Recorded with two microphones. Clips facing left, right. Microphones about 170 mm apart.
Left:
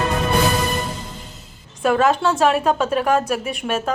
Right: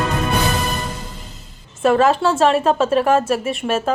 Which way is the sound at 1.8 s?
Centre (ahead or behind).